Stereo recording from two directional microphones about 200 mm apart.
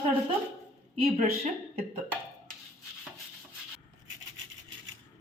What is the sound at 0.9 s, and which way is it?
Speech, 35° right (ahead or behind).